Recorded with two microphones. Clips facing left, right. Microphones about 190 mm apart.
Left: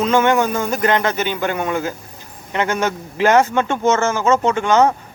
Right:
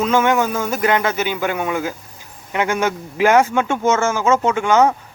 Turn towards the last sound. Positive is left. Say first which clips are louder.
# even
turn(degrees=-10)  # may be behind; listen again after turning